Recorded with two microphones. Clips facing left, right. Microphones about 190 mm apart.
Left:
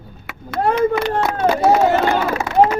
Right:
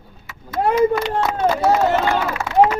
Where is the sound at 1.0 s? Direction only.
5° left (ahead or behind).